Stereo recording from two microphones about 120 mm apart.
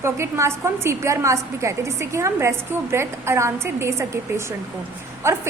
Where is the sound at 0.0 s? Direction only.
25° right (ahead or behind).